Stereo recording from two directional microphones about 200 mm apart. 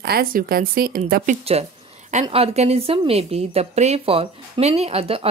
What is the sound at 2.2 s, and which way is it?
A woman's voice, 30° right (ahead or behind).